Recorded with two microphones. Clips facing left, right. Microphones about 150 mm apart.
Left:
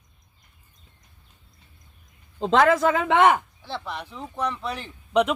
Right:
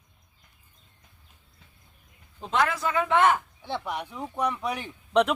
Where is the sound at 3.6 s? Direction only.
15° right (ahead or behind).